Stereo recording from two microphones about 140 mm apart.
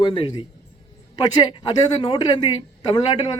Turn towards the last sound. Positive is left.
turn(degrees=30)  # may be behind; listen again after turning